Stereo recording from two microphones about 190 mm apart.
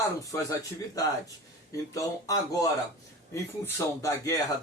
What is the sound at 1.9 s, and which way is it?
Speech, 20° left (ahead or behind).